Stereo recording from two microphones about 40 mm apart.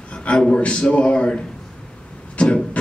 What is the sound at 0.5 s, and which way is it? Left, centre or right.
A man's voice, left.